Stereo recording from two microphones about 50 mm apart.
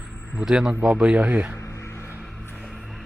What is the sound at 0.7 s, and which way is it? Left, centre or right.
Speech, right.